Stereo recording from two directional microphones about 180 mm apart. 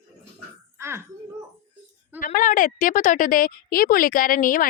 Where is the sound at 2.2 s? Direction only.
45° left (ahead or behind).